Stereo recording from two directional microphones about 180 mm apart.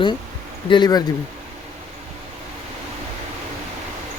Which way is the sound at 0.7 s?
25° left (ahead or behind).